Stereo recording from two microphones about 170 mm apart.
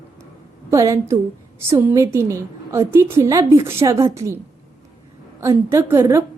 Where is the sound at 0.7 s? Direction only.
20° right (ahead or behind).